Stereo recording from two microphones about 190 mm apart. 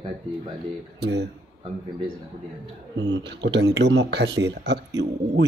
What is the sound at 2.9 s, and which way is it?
Speech, 65° right (ahead or behind).